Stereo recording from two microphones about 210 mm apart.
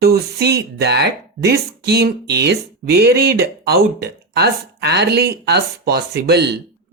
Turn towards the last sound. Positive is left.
turn(degrees=-50)  # may be behind; listen again after turning